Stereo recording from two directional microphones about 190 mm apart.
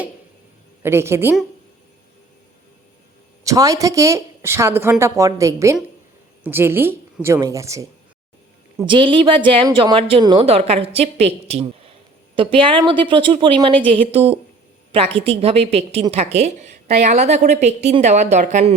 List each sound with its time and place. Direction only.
0.8 s speech: 15° right (ahead or behind)
3.4 s speech: 20° right (ahead or behind)
8.9 s a woman's voice: 25° right (ahead or behind)